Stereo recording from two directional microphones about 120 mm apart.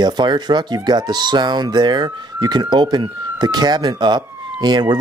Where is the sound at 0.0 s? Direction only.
40° right (ahead or behind).